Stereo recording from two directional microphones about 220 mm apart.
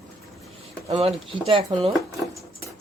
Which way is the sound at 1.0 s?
25° right (ahead or behind).